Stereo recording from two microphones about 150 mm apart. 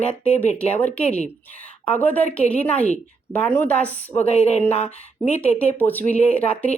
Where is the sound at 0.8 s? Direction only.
10° left (ahead or behind).